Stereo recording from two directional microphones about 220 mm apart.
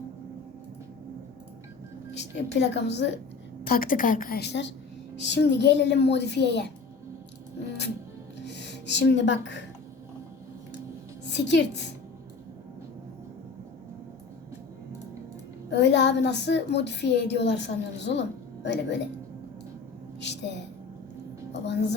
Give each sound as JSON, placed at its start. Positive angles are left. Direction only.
{"t": 2.1, "sound": "a woman's voice", "side_deg": 50}
{"t": 3.6, "sound": "a woman's voice", "side_deg": 40}
{"t": 8.4, "sound": "speech", "side_deg": 50}
{"t": 11.3, "sound": "a woman's voice", "side_deg": 50}
{"t": 15.7, "sound": "a woman's voice", "side_deg": 50}
{"t": 20.2, "sound": "a sound", "side_deg": 50}
{"t": 21.5, "sound": "music", "side_deg": 50}